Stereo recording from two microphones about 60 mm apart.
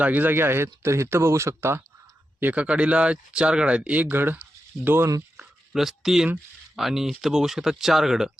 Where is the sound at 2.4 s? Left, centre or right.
Right.